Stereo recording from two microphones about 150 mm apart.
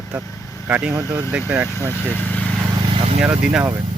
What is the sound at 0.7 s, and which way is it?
Speech, 10° right (ahead or behind).